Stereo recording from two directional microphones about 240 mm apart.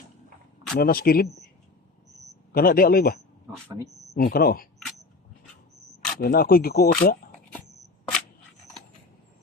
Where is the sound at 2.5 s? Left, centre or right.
Left.